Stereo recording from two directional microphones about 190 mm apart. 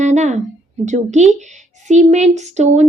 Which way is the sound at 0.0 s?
40° right (ahead or behind).